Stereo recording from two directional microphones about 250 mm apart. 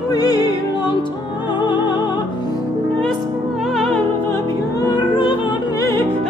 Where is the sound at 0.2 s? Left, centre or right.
Centre.